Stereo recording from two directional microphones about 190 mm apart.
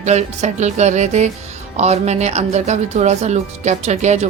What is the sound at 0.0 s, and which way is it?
Speech, 35° right (ahead or behind).